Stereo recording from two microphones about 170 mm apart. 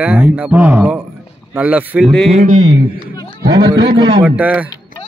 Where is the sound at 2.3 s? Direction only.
45° right (ahead or behind).